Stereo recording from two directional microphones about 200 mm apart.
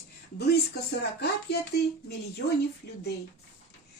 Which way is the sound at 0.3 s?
55° left (ahead or behind).